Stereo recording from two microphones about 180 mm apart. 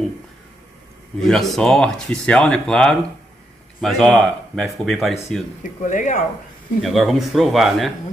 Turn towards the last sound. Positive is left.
turn(degrees=0)  # may be behind; listen again after turning